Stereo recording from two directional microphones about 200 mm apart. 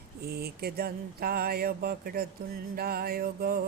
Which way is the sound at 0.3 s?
50° right (ahead or behind).